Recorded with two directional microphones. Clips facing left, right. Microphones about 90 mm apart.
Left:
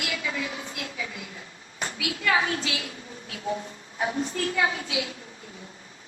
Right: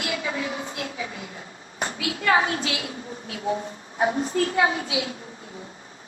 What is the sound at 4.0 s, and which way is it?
A woman's voice, 30° right (ahead or behind).